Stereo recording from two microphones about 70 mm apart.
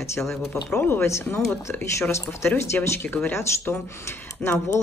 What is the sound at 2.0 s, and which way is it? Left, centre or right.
Speech, left.